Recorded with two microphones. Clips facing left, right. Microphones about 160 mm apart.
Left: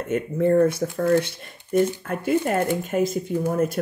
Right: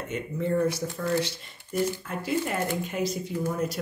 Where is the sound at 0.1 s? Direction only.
55° left (ahead or behind).